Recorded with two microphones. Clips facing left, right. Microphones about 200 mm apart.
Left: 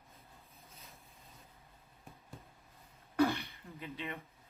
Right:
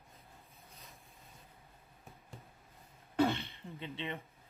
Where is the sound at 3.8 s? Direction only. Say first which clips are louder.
Right 1 dB; 25° right (ahead or behind).